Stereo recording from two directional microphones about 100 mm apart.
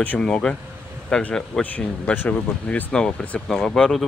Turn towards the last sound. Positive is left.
turn(degrees=5)  # may be behind; listen again after turning